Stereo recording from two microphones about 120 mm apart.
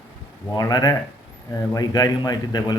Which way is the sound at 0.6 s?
30° left (ahead or behind).